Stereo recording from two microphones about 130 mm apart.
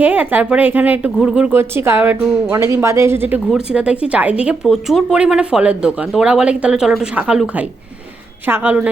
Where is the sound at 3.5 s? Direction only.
5° right (ahead or behind).